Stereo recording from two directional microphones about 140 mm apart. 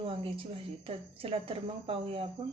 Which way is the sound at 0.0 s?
40° right (ahead or behind).